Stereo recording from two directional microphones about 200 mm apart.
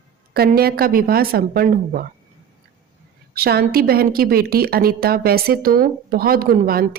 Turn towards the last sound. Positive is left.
turn(degrees=-45)  # may be behind; listen again after turning